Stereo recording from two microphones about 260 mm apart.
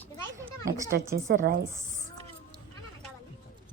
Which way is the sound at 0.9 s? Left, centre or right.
Right.